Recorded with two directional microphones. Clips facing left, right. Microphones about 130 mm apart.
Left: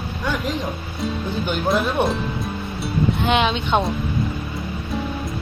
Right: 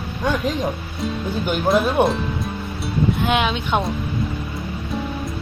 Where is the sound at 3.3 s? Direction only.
5° right (ahead or behind).